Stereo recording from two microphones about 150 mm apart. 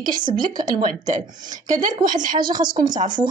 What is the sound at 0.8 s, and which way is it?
Speech, 55° right (ahead or behind).